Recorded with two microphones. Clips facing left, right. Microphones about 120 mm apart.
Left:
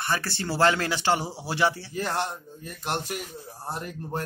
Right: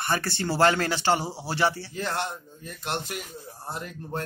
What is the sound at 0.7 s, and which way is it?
Speech, 5° left (ahead or behind).